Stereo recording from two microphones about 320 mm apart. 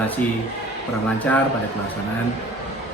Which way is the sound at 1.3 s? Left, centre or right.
Centre.